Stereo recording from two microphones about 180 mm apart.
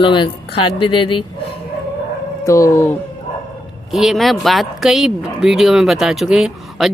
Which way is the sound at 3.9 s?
Centre (ahead or behind).